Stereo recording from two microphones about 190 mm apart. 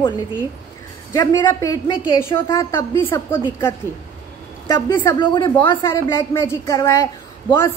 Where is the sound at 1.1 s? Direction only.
20° left (ahead or behind).